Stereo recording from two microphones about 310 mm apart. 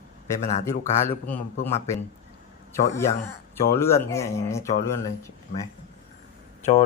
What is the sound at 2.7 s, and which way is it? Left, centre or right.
A man's voice, centre.